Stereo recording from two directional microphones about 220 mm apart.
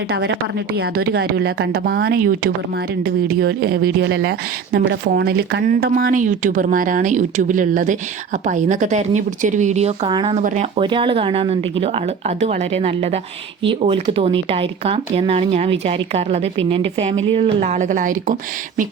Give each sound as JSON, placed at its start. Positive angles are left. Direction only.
{"t": 0.7, "sound": "speech", "side_deg": -45}